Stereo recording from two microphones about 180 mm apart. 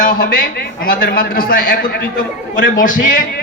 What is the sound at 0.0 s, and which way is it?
A man's voice, 55° left (ahead or behind).